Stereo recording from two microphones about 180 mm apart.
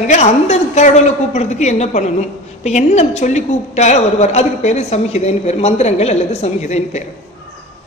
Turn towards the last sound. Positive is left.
turn(degrees=40)  # may be behind; listen again after turning